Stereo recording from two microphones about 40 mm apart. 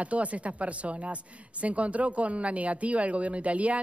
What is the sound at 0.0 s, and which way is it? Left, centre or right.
Speech, right.